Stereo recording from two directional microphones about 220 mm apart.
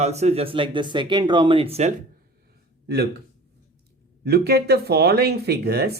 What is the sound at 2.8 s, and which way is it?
Speech, 45° right (ahead or behind).